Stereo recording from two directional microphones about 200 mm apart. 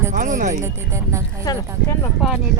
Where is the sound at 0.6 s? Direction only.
15° right (ahead or behind).